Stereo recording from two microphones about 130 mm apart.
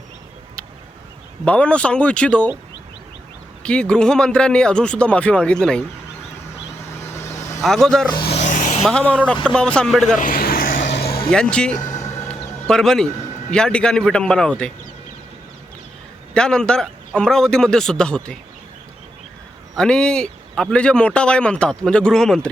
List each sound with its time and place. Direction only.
1.5 s a man's voice: 10° left (ahead or behind)
3.6 s a man's voice: 5° left (ahead or behind)
7.0 s vehicle: 20° left (ahead or behind)
7.6 s a man's voice: centre (ahead or behind)
8.1 s speech: 40° left (ahead or behind)
8.4 s a sound: 80° left
8.8 s a man's voice: 5° left (ahead or behind)
10.2 s vehicle: 90° left
11.3 s a man's voice: 5° left (ahead or behind)
11.9 s music: 25° left (ahead or behind)
12.3 s a sound: 5° left (ahead or behind)
13.5 s a man's voice: 5° left (ahead or behind)
16.3 s a man's voice: 5° left (ahead or behind)
19.7 s a man's voice: 5° left (ahead or behind)